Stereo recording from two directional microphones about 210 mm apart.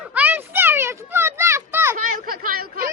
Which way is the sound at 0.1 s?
10° right (ahead or behind).